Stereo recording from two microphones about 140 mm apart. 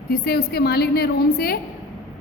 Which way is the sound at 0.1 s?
90° left.